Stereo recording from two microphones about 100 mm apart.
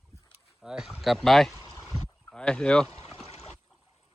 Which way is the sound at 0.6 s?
5° right (ahead or behind).